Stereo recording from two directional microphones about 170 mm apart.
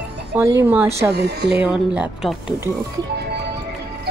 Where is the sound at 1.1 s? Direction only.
75° right (ahead or behind).